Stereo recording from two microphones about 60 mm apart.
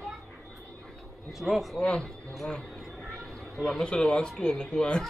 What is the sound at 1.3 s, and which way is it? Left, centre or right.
Speech, centre.